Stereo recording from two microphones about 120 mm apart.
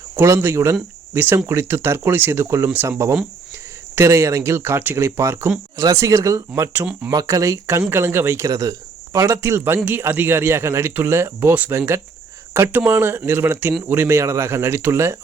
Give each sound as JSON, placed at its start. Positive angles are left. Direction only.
{"t": 0.2, "sound": "speech", "side_deg": -20}
{"t": 6.5, "sound": "speech", "side_deg": -15}
{"t": 7.1, "sound": "speech", "side_deg": -30}